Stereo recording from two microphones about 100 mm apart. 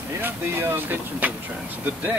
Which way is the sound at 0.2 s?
20° right (ahead or behind).